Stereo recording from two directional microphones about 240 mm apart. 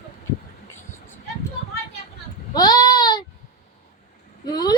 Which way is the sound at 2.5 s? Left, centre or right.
Centre.